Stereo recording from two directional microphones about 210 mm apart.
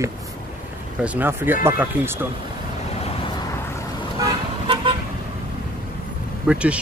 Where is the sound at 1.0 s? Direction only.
10° right (ahead or behind).